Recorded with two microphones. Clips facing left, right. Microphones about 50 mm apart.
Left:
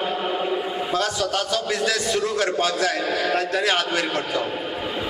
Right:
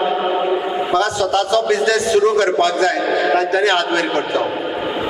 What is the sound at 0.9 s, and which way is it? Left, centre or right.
A man's voice, centre.